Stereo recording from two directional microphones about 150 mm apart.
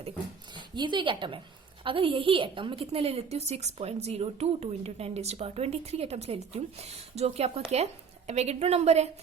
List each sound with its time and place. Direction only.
0.5 s a woman's voice: 30° right (ahead or behind)